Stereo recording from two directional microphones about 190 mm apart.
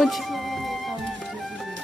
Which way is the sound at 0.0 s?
Centre (ahead or behind).